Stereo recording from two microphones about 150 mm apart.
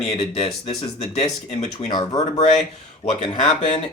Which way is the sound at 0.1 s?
40° left (ahead or behind).